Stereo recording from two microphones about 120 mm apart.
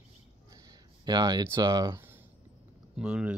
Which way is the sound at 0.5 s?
30° right (ahead or behind).